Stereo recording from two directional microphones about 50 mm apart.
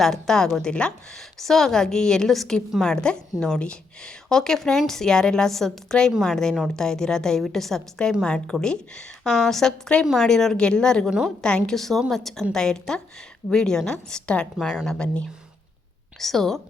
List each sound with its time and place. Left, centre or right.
0.0 s a woman's voice: centre
2.8 s a woman's voice: centre
16.2 s a woman's voice: centre